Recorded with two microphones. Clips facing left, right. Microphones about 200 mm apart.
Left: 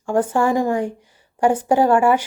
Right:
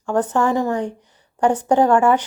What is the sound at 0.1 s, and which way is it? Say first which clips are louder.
A woman's voice: left 1 dB; 10° left (ahead or behind).